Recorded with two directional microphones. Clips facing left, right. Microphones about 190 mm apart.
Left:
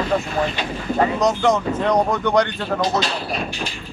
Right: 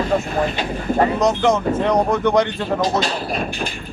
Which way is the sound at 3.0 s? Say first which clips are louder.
Right 2 dB; 45° right (ahead or behind).